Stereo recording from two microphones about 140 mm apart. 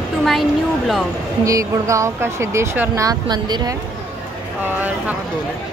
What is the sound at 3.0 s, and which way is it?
Speech, 30° right (ahead or behind).